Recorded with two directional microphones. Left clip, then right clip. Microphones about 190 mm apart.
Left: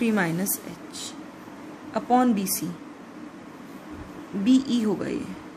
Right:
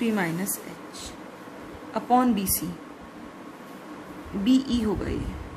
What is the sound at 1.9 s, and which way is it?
Speech, 15° left (ahead or behind).